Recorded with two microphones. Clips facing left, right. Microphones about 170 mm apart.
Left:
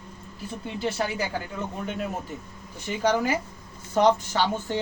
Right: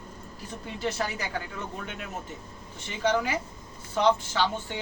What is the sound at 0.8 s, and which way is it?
Speech, 30° left (ahead or behind).